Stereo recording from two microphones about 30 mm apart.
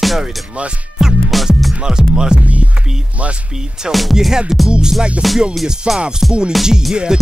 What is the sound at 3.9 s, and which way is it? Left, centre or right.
Music, centre.